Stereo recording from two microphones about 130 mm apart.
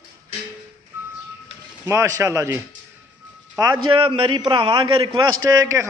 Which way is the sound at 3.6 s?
35° right (ahead or behind).